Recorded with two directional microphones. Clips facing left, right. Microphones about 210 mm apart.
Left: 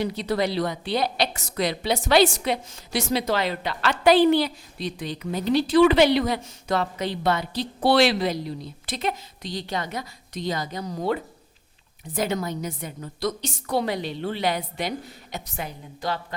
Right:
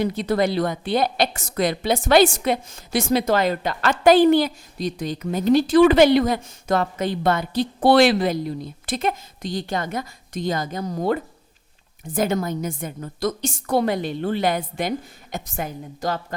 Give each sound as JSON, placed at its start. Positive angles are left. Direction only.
{"t": 0.0, "sound": "a woman's voice", "side_deg": -50}